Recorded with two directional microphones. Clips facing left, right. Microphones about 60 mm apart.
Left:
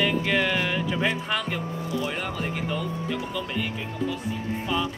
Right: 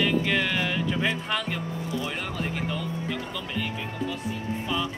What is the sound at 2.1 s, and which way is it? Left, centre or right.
Speech, centre.